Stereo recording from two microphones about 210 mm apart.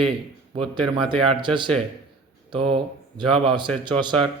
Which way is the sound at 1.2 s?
20° right (ahead or behind).